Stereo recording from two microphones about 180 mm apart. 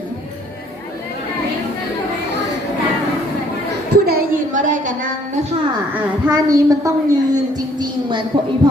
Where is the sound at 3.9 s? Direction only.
60° right (ahead or behind).